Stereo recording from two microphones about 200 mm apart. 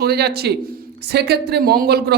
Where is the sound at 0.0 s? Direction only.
55° right (ahead or behind).